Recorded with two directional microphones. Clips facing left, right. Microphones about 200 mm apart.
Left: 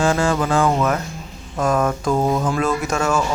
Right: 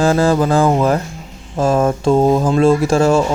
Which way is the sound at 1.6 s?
30° right (ahead or behind).